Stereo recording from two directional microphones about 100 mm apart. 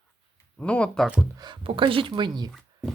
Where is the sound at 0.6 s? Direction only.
10° left (ahead or behind).